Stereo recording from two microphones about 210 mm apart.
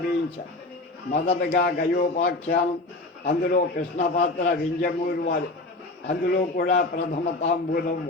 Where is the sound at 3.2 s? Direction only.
40° left (ahead or behind).